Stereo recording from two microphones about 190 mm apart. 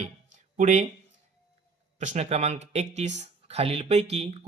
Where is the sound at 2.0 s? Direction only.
35° right (ahead or behind).